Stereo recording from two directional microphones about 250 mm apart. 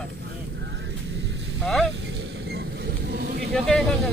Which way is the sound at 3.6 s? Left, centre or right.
Centre.